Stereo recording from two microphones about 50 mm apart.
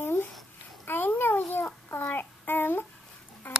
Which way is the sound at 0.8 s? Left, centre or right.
Left.